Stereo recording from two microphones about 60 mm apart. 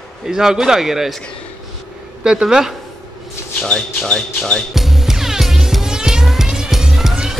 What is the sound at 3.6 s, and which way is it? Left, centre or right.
Speech, centre.